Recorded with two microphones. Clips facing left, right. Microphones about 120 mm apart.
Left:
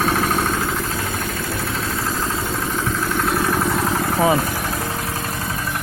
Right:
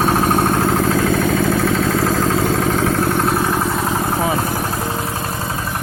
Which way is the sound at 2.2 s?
90° right.